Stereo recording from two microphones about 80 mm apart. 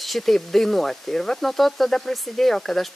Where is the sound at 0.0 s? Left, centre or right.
Centre.